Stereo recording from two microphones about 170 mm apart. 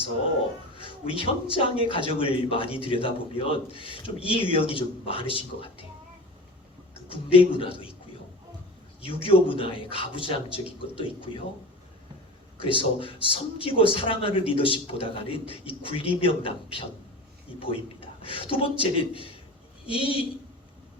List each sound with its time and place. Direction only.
0.9 s a man's voice: 30° left (ahead or behind)
7.1 s a man's voice: 30° left (ahead or behind)
9.0 s a man's voice: 30° left (ahead or behind)
12.6 s a man's voice: 30° left (ahead or behind)